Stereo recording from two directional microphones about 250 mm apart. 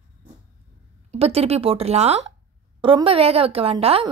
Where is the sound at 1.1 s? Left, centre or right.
Right.